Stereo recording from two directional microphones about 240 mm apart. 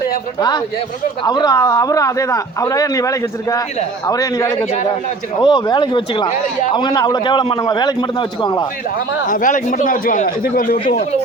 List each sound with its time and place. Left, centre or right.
0.3 s a man's voice: centre
9.2 s speech: left